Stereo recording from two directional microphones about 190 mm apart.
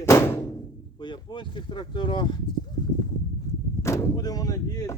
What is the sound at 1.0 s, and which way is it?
Speech, 25° left (ahead or behind).